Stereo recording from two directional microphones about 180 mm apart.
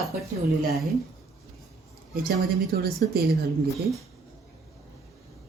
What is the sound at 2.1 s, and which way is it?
A woman's voice, 55° right (ahead or behind).